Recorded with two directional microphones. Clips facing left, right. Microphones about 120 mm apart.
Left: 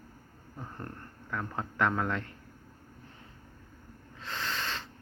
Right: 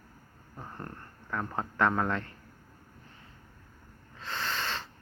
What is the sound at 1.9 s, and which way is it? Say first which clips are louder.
Speech: right 2 dB; 5° right (ahead or behind).